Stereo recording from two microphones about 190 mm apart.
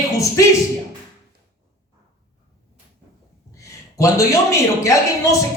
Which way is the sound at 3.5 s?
15° left (ahead or behind).